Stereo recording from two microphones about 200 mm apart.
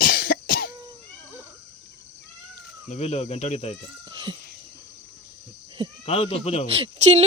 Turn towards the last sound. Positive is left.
turn(degrees=-30)  # may be behind; listen again after turning